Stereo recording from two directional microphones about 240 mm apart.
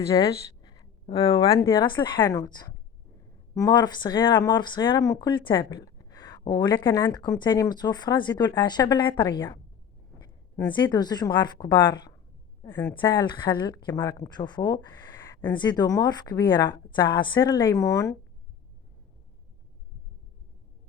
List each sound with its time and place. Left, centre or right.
0.1 s speech: centre
10.6 s speech: centre
12.9 s speech: centre